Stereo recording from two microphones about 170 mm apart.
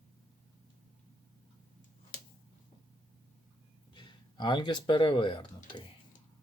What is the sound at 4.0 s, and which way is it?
Speech, 25° left (ahead or behind).